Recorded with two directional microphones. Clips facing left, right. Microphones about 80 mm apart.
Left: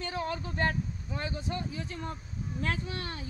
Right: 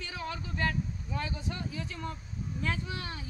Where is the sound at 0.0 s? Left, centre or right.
Left.